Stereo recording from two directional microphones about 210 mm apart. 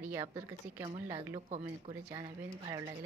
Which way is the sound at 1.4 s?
30° right (ahead or behind).